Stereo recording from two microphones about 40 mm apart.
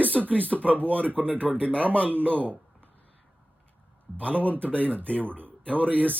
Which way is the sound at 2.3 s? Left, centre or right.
Right.